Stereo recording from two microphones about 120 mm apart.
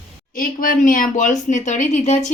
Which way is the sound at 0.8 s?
90° left.